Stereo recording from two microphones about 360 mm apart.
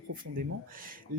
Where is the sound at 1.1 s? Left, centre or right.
Right.